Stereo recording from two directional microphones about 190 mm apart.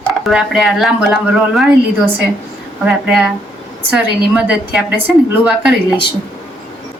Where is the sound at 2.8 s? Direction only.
5° right (ahead or behind).